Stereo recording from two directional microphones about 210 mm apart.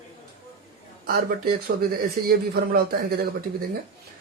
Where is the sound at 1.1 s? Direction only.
45° right (ahead or behind).